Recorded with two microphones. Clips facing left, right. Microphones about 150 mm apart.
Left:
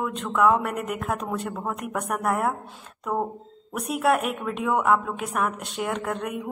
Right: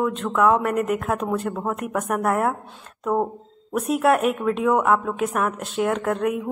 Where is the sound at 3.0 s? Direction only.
25° right (ahead or behind).